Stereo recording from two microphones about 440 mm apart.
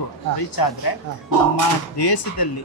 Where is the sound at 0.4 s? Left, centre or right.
Left.